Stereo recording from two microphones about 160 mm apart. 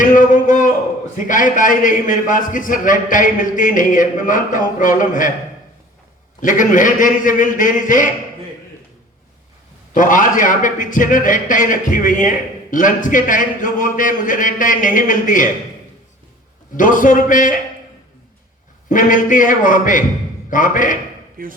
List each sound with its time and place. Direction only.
0.0 s a sound: 55° left (ahead or behind)
1.1 s a man's voice: 55° left (ahead or behind)
6.4 s a man's voice: 55° left (ahead or behind)
9.9 s a man's voice: 55° left (ahead or behind)
16.7 s a man's voice: 55° left (ahead or behind)
18.9 s a man's voice: 55° left (ahead or behind)
21.4 s speech: 60° right (ahead or behind)